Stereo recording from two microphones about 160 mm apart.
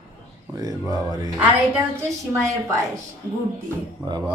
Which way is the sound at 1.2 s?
10° right (ahead or behind).